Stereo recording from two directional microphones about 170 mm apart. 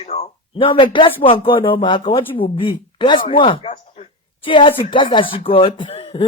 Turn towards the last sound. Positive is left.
turn(degrees=30)  # may be behind; listen again after turning